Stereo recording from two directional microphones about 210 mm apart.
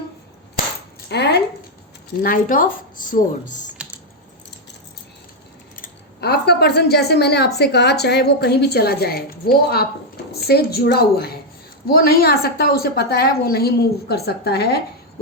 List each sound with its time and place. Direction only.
1.0 s speech: 50° left (ahead or behind)
3.8 s typing: 5° right (ahead or behind)
5.7 s speech: 45° left (ahead or behind)